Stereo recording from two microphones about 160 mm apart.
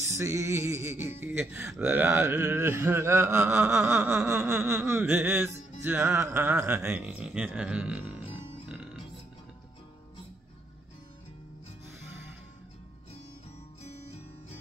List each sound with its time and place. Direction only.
0.2 s speech: 15° right (ahead or behind)